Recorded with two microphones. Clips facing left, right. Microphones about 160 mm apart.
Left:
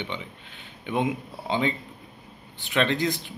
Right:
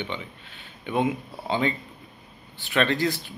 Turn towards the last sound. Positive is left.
turn(degrees=20)  # may be behind; listen again after turning